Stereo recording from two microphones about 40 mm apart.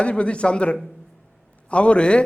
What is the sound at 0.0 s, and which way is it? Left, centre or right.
Speech, left.